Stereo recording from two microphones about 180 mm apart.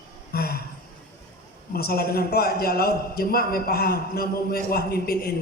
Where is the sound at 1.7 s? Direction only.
55° left (ahead or behind).